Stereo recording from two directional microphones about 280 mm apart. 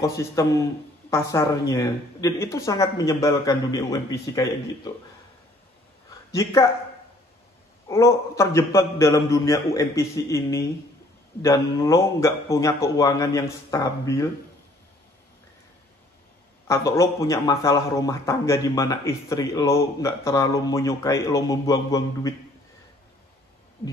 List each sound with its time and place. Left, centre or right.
0.0 s a man's voice: centre
6.3 s a man's voice: centre
7.9 s a man's voice: centre
16.6 s a man's voice: centre